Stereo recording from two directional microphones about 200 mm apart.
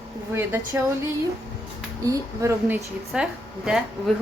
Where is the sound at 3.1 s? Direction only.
5° right (ahead or behind).